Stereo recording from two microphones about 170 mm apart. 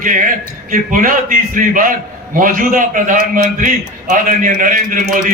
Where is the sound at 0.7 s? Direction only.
55° right (ahead or behind).